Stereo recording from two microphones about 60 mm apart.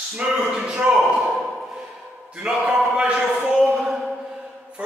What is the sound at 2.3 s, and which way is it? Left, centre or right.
Speech, centre.